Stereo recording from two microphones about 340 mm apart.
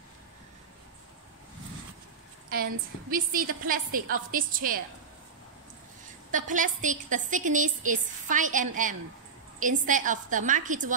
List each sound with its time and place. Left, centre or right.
2.5 s a woman's voice: right
6.3 s a woman's voice: right